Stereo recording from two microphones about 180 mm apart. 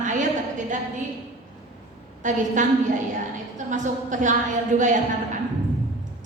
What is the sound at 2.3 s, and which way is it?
A woman's voice, 45° right (ahead or behind).